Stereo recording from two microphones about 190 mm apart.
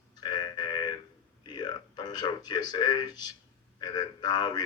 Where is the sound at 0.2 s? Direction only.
25° left (ahead or behind).